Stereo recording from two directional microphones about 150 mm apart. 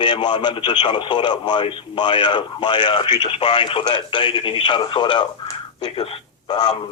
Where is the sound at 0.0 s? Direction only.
30° left (ahead or behind).